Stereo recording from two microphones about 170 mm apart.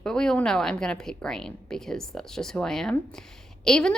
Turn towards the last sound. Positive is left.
turn(degrees=5)  # may be behind; listen again after turning